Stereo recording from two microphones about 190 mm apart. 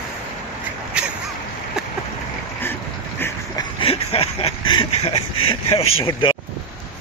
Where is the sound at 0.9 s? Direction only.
5° right (ahead or behind).